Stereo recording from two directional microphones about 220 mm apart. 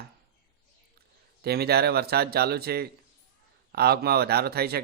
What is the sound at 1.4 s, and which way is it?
Speech, 45° right (ahead or behind).